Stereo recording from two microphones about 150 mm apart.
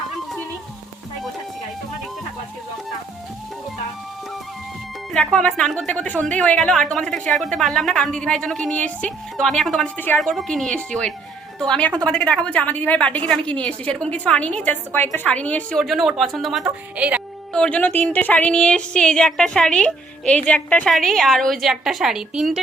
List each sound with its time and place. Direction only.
5.1 s a woman's voice: 5° left (ahead or behind)
15.8 s speech: centre (ahead or behind)
17.5 s speech: 5° left (ahead or behind)